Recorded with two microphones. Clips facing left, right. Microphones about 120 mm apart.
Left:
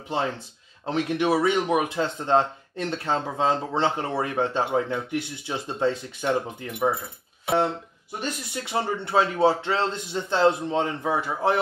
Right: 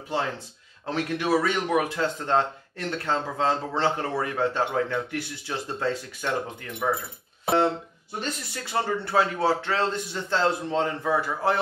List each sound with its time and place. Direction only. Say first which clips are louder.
0.8 s speech: left 3 dB; 20° left (ahead or behind)
8.2 s speech: left 1 dB; 20° left (ahead or behind)